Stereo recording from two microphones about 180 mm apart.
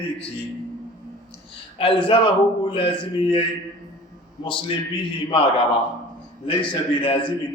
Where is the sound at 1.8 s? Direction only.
30° left (ahead or behind).